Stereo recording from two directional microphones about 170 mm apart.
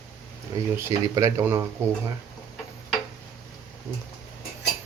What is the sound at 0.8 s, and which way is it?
Speech, 15° right (ahead or behind).